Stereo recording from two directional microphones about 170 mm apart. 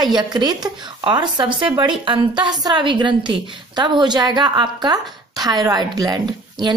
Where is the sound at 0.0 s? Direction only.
25° right (ahead or behind).